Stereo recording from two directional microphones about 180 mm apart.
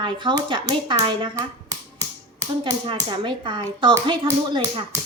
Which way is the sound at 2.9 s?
25° right (ahead or behind).